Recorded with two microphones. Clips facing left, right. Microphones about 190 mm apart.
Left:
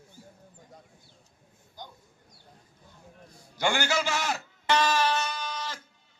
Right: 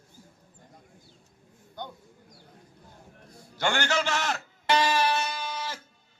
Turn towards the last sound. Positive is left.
turn(degrees=-10)  # may be behind; listen again after turning